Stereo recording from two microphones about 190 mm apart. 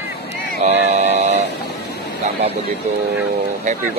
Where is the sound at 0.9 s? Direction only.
35° right (ahead or behind).